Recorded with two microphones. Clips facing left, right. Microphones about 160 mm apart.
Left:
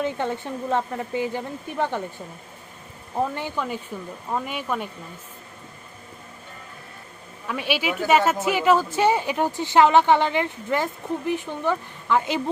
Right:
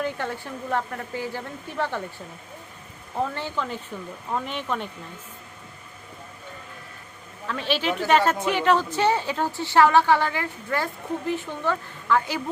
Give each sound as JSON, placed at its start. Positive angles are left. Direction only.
{"t": 0.0, "sound": "speech", "side_deg": 20}
{"t": 3.2, "sound": "speech", "side_deg": 15}
{"t": 7.4, "sound": "speech", "side_deg": 10}